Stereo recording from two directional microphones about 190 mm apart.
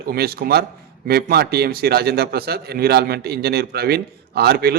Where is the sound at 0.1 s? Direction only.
50° right (ahead or behind).